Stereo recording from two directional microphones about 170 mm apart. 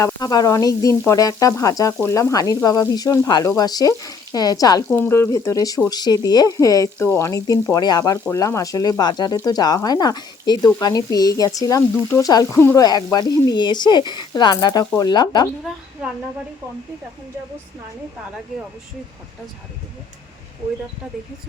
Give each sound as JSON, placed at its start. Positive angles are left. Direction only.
{"t": 0.0, "sound": "speech", "side_deg": 25}
{"t": 4.9, "sound": "speech", "side_deg": 10}